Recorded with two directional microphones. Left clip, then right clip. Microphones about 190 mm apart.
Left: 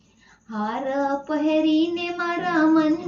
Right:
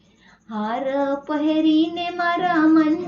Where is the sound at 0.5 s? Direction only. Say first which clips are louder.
Right 2 dB; 20° right (ahead or behind).